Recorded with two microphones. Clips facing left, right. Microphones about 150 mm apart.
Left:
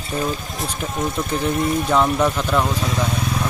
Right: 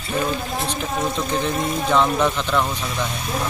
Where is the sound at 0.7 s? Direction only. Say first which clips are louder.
Left 2 dB; 5° left (ahead or behind).